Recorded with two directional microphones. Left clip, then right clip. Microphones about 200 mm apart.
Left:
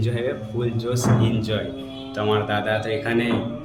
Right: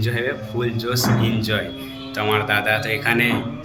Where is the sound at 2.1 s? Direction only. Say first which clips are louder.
Right 3 dB; 25° left (ahead or behind).